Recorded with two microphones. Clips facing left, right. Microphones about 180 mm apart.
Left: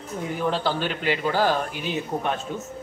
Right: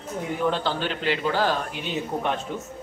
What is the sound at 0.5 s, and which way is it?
Speech, 5° left (ahead or behind).